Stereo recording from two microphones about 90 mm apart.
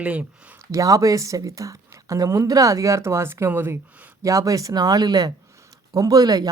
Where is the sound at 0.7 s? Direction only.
40° right (ahead or behind); by 3.7 s 25° right (ahead or behind).